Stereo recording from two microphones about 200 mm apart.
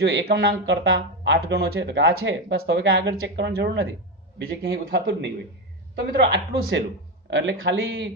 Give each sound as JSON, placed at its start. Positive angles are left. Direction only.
{"t": 0.0, "sound": "speech", "side_deg": -60}